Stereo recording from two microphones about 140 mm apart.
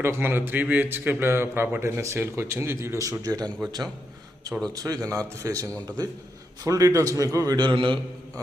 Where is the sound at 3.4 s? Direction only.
5° left (ahead or behind).